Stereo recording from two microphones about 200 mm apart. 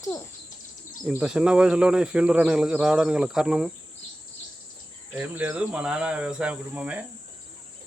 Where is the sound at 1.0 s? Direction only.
5° right (ahead or behind).